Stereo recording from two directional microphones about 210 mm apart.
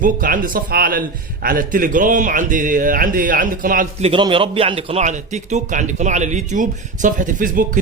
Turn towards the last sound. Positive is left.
turn(degrees=-40)  # may be behind; listen again after turning